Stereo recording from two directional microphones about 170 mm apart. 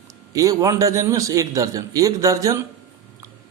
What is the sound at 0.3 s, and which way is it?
A man's voice, 20° right (ahead or behind).